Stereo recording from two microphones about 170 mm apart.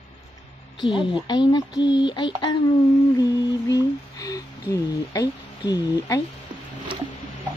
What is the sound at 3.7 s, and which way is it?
Speech, 20° left (ahead or behind).